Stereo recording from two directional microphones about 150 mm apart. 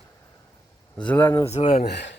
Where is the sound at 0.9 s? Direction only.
10° left (ahead or behind).